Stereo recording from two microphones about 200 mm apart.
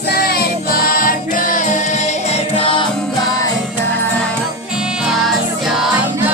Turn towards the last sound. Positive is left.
turn(degrees=-5)  # may be behind; listen again after turning